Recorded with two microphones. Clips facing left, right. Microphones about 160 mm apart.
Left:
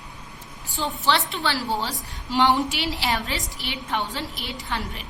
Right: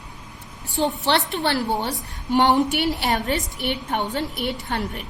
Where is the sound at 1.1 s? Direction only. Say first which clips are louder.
Right 2 dB; 60° right (ahead or behind).